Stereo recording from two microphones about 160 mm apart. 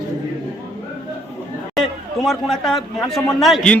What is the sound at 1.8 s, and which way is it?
A man's voice, centre (ahead or behind).